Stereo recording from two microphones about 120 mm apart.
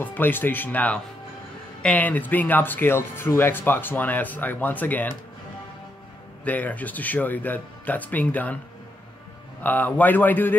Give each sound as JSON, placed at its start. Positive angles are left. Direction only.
{"t": 0.0, "sound": "speech", "side_deg": 15}
{"t": 6.4, "sound": "speech", "side_deg": 15}
{"t": 9.6, "sound": "speech", "side_deg": 15}